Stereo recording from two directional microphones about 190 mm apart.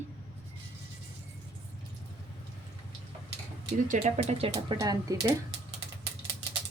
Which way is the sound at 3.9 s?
40° right (ahead or behind).